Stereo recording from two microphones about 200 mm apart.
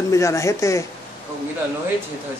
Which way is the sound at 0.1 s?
15° left (ahead or behind).